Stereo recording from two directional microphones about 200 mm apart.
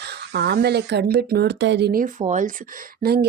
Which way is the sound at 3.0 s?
50° right (ahead or behind).